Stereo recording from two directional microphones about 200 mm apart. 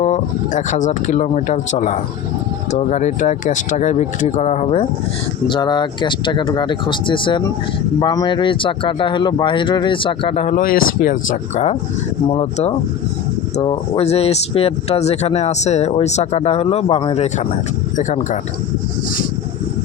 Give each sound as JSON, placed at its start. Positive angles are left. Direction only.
{"t": 0.0, "sound": "speech", "side_deg": 35}
{"t": 2.9, "sound": "speech", "side_deg": 35}